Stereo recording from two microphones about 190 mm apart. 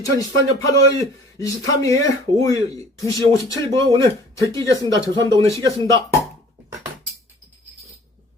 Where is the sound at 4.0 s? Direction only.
15° left (ahead or behind).